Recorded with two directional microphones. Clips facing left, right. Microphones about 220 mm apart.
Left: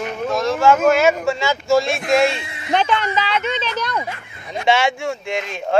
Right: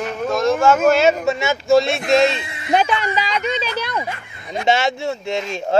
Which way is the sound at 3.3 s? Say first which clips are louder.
Even; 40° right (ahead or behind).